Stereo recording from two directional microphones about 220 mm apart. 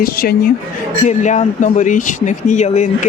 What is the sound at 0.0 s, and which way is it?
Speech, 45° left (ahead or behind).